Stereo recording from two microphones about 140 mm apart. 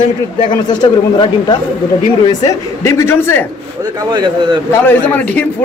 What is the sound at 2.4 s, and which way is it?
A man's voice, 20° left (ahead or behind).